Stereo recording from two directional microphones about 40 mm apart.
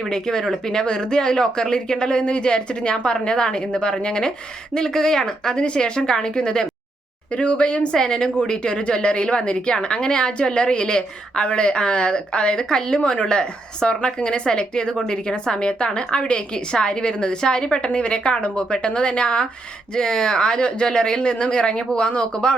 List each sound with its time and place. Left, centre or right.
0.1 s a woman's voice: centre
7.9 s a woman's voice: centre